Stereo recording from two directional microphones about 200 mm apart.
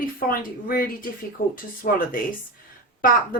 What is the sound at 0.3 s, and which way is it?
Speech, 45° left (ahead or behind).